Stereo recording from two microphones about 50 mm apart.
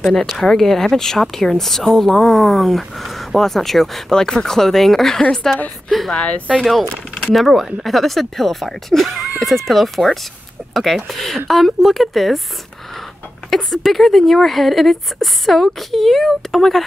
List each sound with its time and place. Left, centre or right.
0.0 s speech: centre
6.1 s speech: left
6.6 s speech: centre
13.5 s speech: centre